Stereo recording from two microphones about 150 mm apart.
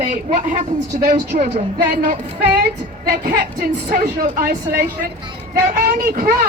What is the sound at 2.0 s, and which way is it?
Child singing, 90° right.